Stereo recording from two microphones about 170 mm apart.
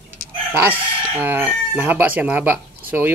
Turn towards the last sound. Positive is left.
turn(degrees=-10)  # may be behind; listen again after turning